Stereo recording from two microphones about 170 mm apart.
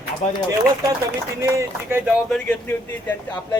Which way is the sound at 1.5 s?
15° right (ahead or behind).